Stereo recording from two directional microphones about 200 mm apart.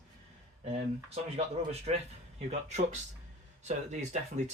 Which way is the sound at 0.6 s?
30° right (ahead or behind).